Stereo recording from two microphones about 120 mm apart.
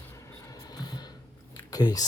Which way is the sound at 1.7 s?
30° left (ahead or behind).